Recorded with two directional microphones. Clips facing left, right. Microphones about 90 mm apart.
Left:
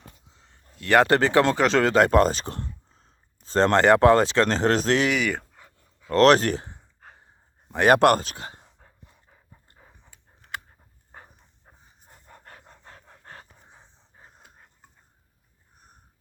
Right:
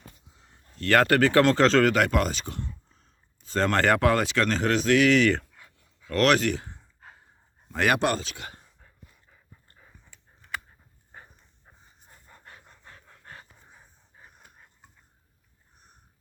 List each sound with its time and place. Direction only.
0.3 s a sound: 5° right (ahead or behind)
0.8 s speech: 20° left (ahead or behind)
1.9 s speech: 35° left (ahead or behind)
5.1 s speech: 10° left (ahead or behind)
6.1 s speech: 35° left (ahead or behind)
7.9 s speech: 55° left (ahead or behind)
8.4 s speech: 30° left (ahead or behind)
8.8 s dog: 40° left (ahead or behind)
12.3 s pant: 55° left (ahead or behind)
13.7 s pant: 25° left (ahead or behind)